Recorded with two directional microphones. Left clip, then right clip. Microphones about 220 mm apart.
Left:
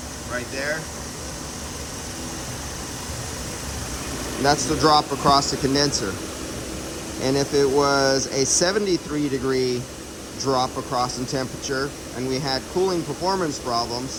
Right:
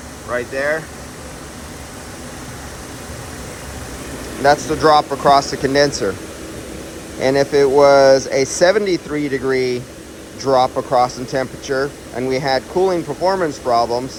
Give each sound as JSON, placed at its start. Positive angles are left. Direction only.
{"t": 0.3, "sound": "speech", "side_deg": 5}
{"t": 4.4, "sound": "speech", "side_deg": 20}
{"t": 7.2, "sound": "speech", "side_deg": 15}